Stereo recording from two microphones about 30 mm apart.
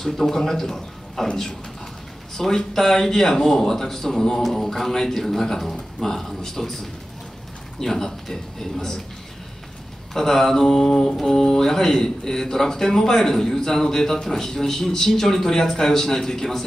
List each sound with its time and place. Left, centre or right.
0.0 s a man's voice: centre
2.3 s a man's voice: centre
10.1 s a man's voice: centre
11.1 s a man's voice: centre